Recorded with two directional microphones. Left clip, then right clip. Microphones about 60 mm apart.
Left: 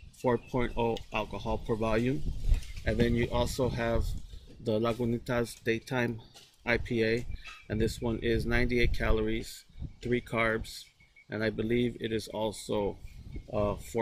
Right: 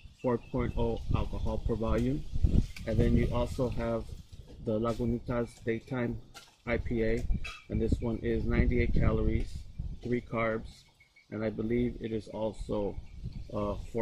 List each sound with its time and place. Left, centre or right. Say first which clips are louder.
0.2 s speech: left 2 dB; left
3.7 s speech: left 2 dB; left